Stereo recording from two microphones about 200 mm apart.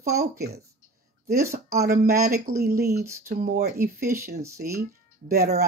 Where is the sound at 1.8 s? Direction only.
45° right (ahead or behind).